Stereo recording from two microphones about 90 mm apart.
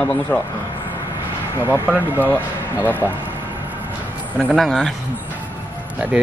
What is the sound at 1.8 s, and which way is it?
Speech, 20° right (ahead or behind).